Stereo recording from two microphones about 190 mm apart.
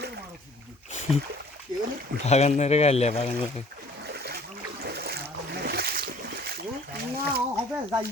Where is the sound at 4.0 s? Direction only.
55° right (ahead or behind).